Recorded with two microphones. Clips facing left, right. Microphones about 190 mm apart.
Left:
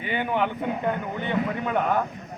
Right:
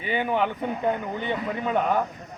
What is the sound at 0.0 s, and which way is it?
Speech, 10° right (ahead or behind).